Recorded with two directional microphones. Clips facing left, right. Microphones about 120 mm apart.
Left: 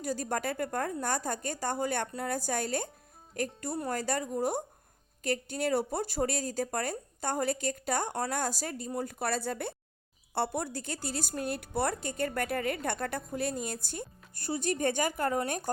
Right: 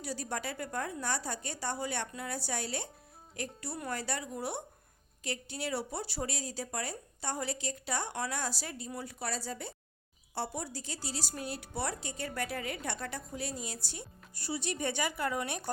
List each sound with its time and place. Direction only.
0.0 s a woman's voice: 45° left (ahead or behind)